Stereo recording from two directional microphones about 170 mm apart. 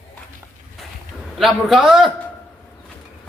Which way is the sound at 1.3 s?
Centre (ahead or behind).